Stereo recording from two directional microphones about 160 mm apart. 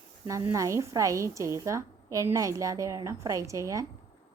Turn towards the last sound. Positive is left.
turn(degrees=-20)  # may be behind; listen again after turning